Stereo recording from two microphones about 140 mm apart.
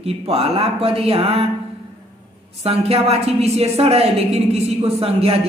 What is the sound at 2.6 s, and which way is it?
A man's voice, 45° right (ahead or behind).